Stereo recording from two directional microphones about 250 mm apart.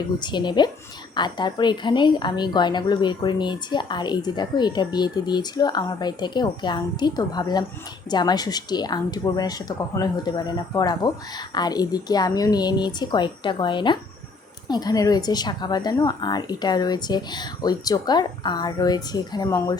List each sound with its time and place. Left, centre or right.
0.2 s a woman's voice: centre